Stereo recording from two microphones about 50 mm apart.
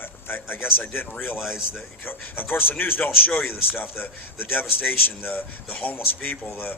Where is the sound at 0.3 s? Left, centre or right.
Left.